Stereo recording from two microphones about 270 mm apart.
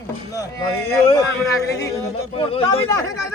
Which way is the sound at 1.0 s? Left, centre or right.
Centre.